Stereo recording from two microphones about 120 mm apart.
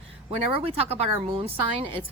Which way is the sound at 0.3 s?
55° right (ahead or behind).